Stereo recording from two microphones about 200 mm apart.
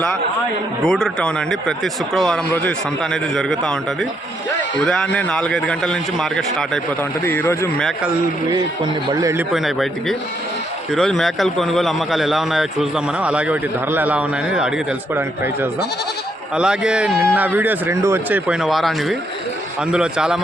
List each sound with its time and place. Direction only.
0.9 s a man's voice: 5° left (ahead or behind)
4.8 s a man's voice: 5° left (ahead or behind)
9.0 s a man's voice: 20° right (ahead or behind)
9.5 s a man's voice: centre (ahead or behind)
16.6 s a man's voice: 5° right (ahead or behind)